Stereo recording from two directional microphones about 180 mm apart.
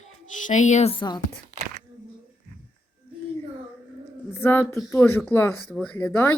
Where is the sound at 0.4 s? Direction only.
40° left (ahead or behind); by 1.2 s 25° left (ahead or behind).